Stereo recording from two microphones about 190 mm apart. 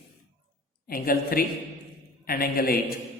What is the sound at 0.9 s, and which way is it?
A man's voice, 50° left (ahead or behind).